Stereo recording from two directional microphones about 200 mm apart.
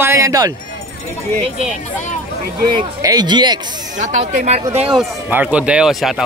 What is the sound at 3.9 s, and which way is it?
Speech, 40° right (ahead or behind).